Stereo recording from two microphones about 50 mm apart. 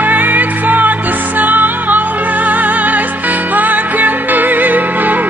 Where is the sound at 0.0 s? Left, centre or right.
Right.